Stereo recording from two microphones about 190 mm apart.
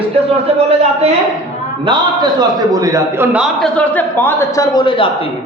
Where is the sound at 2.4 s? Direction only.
20° right (ahead or behind).